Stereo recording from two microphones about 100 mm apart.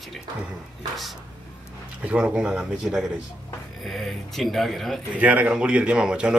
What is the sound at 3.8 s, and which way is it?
Speech, 5° left (ahead or behind).